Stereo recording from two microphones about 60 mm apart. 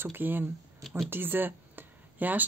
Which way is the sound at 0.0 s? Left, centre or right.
Right.